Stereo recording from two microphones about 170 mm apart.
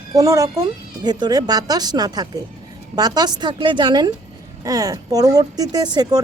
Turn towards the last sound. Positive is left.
turn(degrees=-25)  # may be behind; listen again after turning